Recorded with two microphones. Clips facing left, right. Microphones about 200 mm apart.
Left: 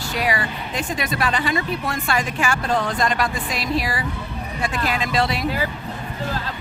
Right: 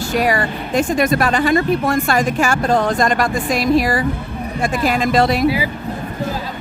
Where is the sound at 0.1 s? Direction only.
45° right (ahead or behind).